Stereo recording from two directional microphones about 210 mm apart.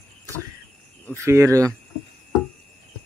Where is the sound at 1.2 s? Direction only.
15° right (ahead or behind).